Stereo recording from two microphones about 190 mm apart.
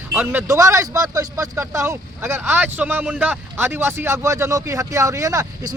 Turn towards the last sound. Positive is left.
turn(degrees=-15)  # may be behind; listen again after turning